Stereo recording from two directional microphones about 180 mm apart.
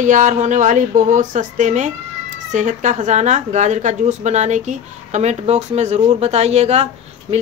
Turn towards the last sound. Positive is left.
turn(degrees=-35)  # may be behind; listen again after turning